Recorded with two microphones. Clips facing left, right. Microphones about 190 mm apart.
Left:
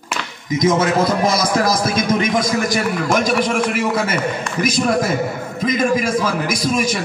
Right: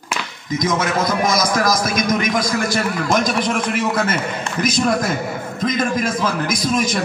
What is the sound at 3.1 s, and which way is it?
A man's voice, 10° left (ahead or behind).